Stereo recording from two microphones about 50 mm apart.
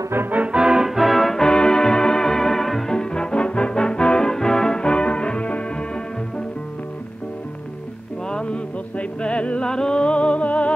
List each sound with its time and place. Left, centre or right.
0.3 s music: right
0.6 s music: centre
1.4 s music: centre
8.3 s music: left